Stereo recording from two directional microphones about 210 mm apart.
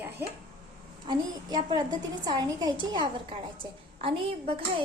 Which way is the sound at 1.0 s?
20° right (ahead or behind).